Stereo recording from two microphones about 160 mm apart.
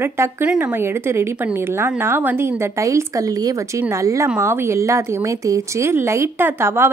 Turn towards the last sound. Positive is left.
turn(degrees=-15)  # may be behind; listen again after turning